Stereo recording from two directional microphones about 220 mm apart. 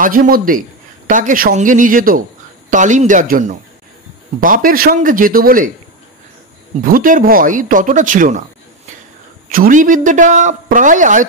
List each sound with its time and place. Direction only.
0.0 s a man's voice: 40° right (ahead or behind)
6.8 s a man's voice: 40° right (ahead or behind)
9.5 s a man's voice: 40° right (ahead or behind)